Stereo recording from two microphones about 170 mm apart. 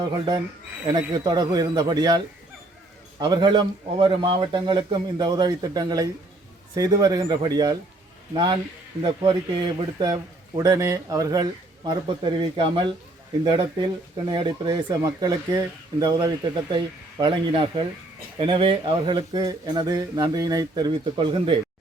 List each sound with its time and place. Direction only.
0.0 s speech: 25° right (ahead or behind)
10.6 s speech: 20° right (ahead or behind)